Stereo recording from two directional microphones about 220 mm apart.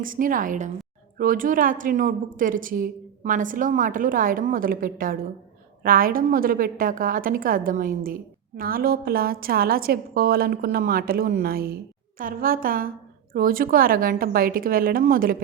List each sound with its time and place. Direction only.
0.0 s a woman's voice: 40° right (ahead or behind)